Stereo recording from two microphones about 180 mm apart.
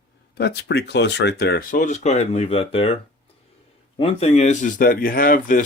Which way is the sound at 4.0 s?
35° left (ahead or behind).